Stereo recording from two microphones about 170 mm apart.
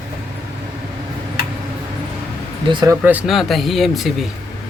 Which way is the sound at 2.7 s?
25° right (ahead or behind).